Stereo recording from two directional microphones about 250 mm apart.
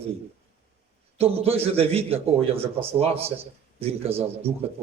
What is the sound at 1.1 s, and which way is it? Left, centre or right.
A man's voice, right.